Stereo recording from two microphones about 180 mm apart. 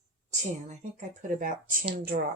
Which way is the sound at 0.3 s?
40° right (ahead or behind).